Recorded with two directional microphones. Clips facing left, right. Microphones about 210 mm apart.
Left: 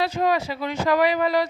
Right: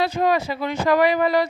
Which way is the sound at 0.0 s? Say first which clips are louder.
Right 2 dB; 55° right (ahead or behind).